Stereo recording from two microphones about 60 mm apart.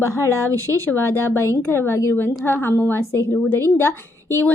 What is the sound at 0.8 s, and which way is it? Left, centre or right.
Speech, left.